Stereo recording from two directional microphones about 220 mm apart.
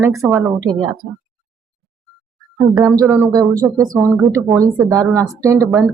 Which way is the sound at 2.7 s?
15° right (ahead or behind).